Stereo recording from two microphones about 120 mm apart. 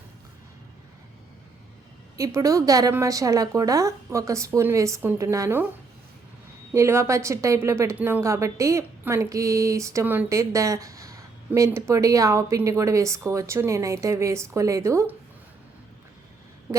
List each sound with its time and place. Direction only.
2.1 s speech: 25° right (ahead or behind)
6.7 s speech: 20° right (ahead or behind)